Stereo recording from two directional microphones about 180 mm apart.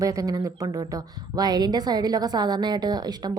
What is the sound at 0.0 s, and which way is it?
A woman's voice, 20° right (ahead or behind).